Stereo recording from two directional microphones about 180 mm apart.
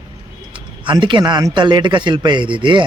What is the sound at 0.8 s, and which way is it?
A man's voice, 25° right (ahead or behind).